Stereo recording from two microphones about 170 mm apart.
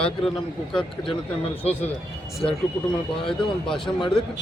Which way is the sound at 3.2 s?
5° left (ahead or behind).